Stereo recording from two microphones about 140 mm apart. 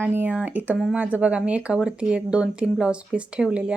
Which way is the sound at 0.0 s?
15° right (ahead or behind).